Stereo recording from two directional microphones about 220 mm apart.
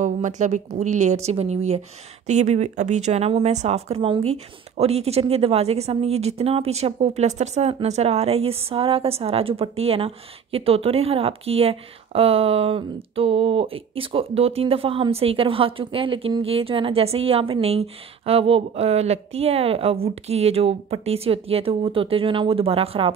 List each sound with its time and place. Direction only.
0.0 s speech: 35° right (ahead or behind)